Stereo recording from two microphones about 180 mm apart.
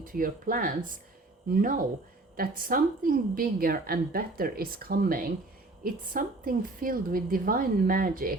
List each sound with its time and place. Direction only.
0.0 s a woman's voice: 50° right (ahead or behind)